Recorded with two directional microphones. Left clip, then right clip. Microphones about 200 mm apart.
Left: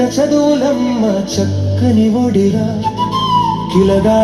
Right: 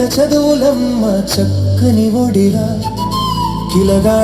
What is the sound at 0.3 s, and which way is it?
Music, 45° right (ahead or behind).